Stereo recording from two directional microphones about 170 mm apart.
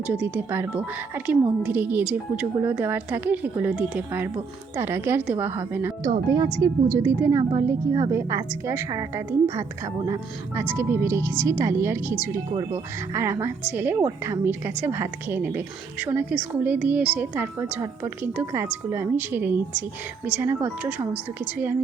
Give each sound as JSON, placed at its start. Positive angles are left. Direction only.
{"t": 0.1, "sound": "a woman's voice", "side_deg": -10}
{"t": 12.5, "sound": "a woman's voice", "side_deg": -30}
{"t": 13.1, "sound": "a woman's voice", "side_deg": -15}